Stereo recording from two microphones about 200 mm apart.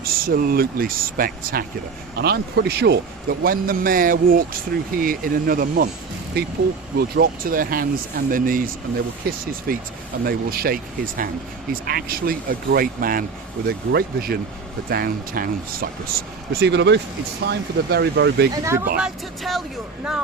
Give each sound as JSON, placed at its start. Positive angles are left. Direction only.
{"t": 0.0, "sound": "a man's voice", "side_deg": -45}
{"t": 7.2, "sound": "a man's voice", "side_deg": -45}
{"t": 18.5, "sound": "speech", "side_deg": -15}
{"t": 18.9, "sound": "speech", "side_deg": 0}